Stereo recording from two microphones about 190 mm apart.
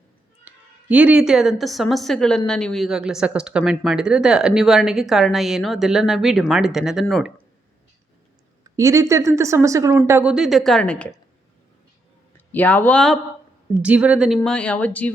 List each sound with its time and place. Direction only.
0.4 s a woman's voice: 5° right (ahead or behind)
8.6 s a woman's voice: 15° right (ahead or behind); by 11.1 s 5° left (ahead or behind)
12.5 s speech: 10° left (ahead or behind)
13.8 s speech: 5° right (ahead or behind)